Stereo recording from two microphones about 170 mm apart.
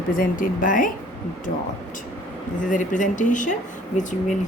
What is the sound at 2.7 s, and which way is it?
Speech, 50° left (ahead or behind).